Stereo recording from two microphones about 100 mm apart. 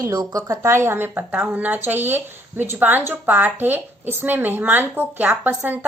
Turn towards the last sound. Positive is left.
turn(degrees=-20)  # may be behind; listen again after turning